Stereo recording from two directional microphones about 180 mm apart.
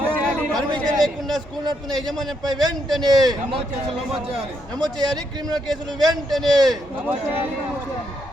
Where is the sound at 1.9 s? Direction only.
25° right (ahead or behind).